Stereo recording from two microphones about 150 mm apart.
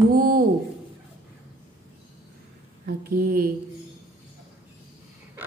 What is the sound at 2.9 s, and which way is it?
Speech, 85° right.